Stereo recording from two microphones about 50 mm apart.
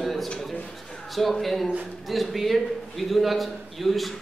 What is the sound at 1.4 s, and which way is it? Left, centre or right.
A man's voice, centre.